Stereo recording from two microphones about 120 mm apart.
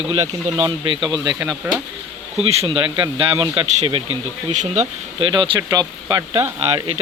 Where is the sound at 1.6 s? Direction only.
15° right (ahead or behind).